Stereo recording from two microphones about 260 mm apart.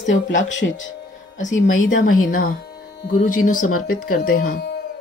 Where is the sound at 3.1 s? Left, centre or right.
Left.